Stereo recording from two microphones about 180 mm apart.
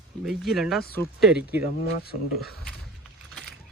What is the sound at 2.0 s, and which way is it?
Speech, 60° left (ahead or behind).